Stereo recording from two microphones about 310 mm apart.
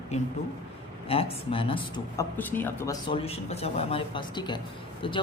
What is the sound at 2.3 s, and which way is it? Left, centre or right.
Speech, centre.